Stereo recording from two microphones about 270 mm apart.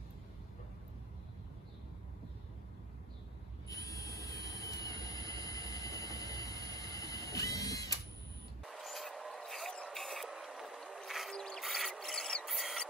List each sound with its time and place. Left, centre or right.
3.6 s train: centre
8.6 s mechanisms: centre